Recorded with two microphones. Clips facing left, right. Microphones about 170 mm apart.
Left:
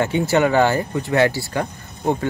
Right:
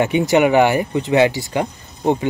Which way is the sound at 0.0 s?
15° right (ahead or behind).